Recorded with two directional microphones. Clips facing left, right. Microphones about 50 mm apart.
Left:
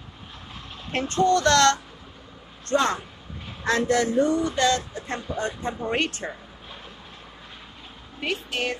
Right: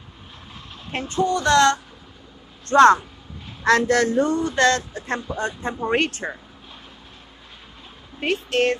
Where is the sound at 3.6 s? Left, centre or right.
Right.